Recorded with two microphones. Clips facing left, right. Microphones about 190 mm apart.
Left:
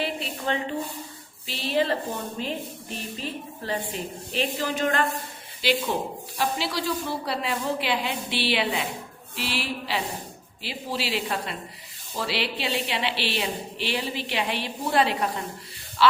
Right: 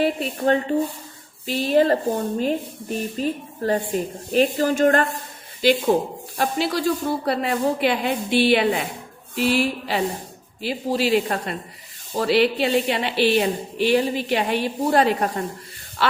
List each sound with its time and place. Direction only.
0.0 s speech: 45° right (ahead or behind)
3.2 s speech: 45° right (ahead or behind)